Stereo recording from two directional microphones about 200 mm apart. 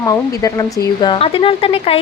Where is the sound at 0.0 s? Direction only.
15° left (ahead or behind).